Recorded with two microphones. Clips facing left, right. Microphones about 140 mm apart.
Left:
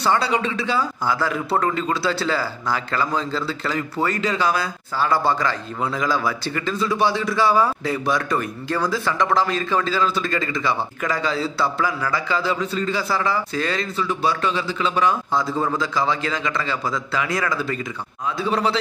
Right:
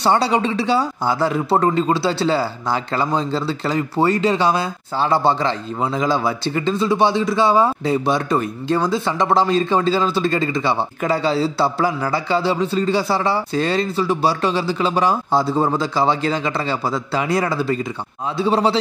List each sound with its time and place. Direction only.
0.0 s a man's voice: 30° right (ahead or behind)